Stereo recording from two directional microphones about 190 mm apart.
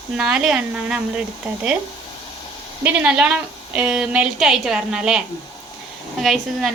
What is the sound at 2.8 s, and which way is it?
A woman's voice, 5° right (ahead or behind).